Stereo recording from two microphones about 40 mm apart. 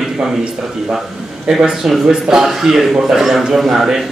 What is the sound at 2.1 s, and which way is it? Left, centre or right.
A man's voice, centre.